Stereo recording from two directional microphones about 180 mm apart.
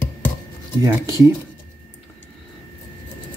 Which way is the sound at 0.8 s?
15° right (ahead or behind).